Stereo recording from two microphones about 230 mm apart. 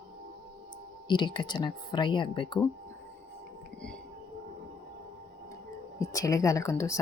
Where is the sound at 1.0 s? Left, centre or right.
Centre.